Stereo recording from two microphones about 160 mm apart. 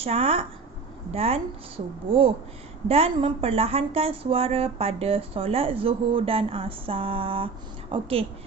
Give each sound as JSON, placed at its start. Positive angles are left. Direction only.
{"t": 0.0, "sound": "speech", "side_deg": -40}